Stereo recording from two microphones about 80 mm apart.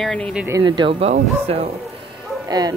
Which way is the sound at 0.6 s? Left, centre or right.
Right.